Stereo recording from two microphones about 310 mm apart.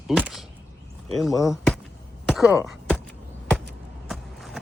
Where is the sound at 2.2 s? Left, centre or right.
Centre.